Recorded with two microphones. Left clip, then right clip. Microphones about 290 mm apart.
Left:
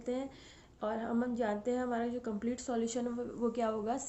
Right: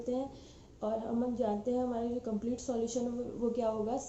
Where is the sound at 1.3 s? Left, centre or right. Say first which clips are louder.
Right 2 dB; left.